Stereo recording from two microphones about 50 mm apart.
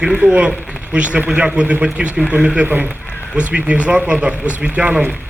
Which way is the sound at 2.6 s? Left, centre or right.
Right.